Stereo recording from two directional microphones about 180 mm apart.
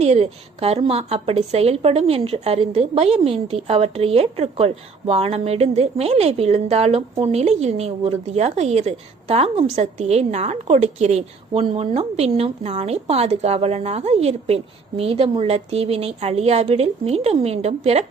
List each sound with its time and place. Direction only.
0.0 s a woman's voice: 35° right (ahead or behind)